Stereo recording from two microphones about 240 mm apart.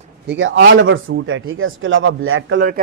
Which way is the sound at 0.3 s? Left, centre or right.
Right.